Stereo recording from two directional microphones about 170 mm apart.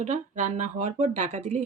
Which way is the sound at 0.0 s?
45° right (ahead or behind).